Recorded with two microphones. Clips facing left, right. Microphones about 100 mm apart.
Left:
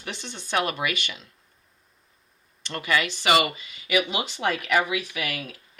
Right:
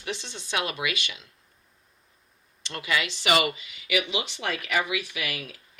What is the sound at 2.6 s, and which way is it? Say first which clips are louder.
Speech: left 3 dB; 50° left (ahead or behind).